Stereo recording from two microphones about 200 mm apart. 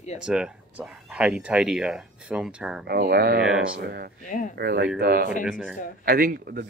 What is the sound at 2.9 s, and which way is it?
Speech, 50° right (ahead or behind).